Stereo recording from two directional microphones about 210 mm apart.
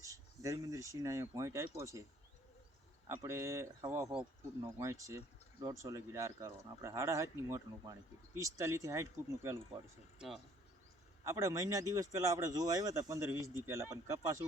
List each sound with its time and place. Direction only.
0.0 s speech: 15° right (ahead or behind)
3.2 s speech: 15° right (ahead or behind)
4.0 s speech: 5° right (ahead or behind)
11.3 s speech: 15° right (ahead or behind)